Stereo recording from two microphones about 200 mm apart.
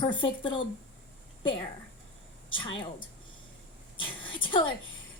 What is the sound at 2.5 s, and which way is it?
A woman's voice, 25° left (ahead or behind).